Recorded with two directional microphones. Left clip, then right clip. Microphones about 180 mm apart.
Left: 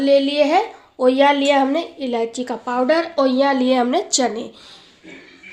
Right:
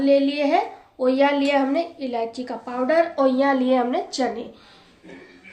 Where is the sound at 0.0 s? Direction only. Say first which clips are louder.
Left 4 dB; 50° left (ahead or behind).